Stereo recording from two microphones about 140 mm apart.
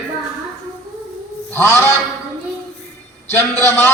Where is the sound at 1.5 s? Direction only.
15° left (ahead or behind).